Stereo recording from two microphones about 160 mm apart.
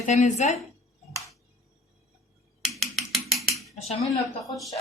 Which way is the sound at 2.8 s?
Centre (ahead or behind).